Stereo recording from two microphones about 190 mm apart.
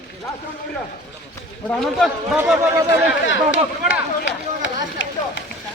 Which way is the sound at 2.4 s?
10° right (ahead or behind).